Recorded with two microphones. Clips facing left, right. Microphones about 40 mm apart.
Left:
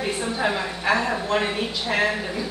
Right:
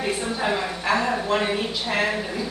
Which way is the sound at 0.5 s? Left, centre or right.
Centre.